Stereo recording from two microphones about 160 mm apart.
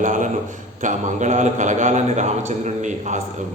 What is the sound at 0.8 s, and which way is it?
A man's voice, 50° right (ahead or behind).